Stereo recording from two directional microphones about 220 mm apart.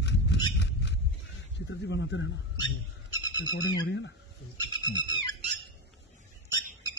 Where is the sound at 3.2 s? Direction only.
20° left (ahead or behind).